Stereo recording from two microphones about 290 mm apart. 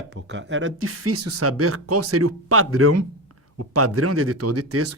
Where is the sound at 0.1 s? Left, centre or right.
Right.